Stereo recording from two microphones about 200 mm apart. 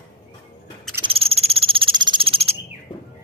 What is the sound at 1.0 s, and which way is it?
Cricket, 30° right (ahead or behind).